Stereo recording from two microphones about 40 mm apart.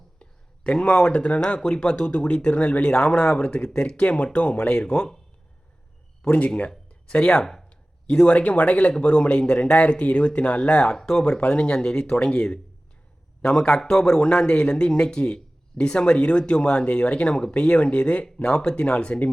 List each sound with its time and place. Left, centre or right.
0.2 s a sound: left
0.9 s speech: left
3.0 s speech: centre
6.8 s a sound: left
8.1 s speech: left
10.9 s speech: centre; by 18.3 s left
18.5 s speech: centre